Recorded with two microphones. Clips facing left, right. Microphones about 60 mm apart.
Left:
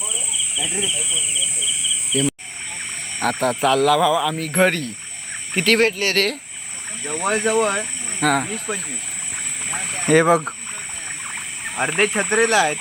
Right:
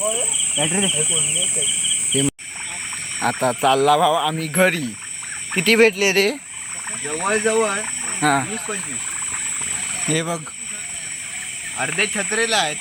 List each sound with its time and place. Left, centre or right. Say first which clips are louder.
0.0 s speech: right 8 dB; right
0.6 s speech: right 6 dB; right
2.1 s speech: even; centre
10.1 s speech: left 9 dB; left
11.8 s speech: left 3 dB; centre